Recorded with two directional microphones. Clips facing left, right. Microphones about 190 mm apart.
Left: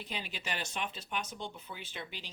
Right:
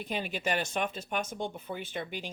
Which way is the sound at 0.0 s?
50° right (ahead or behind).